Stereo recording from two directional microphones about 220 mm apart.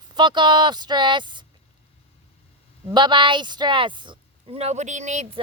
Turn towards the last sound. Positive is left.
turn(degrees=-30)  # may be behind; listen again after turning